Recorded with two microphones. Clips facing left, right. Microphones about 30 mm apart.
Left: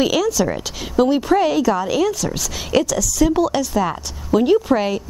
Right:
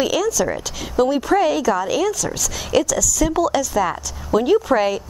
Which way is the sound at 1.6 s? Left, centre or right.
Left.